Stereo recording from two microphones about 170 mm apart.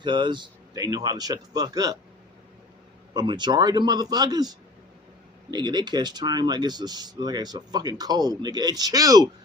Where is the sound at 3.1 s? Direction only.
25° right (ahead or behind).